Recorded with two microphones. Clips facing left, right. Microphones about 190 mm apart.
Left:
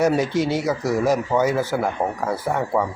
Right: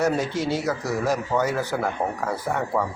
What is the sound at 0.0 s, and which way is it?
Speech, 10° left (ahead or behind).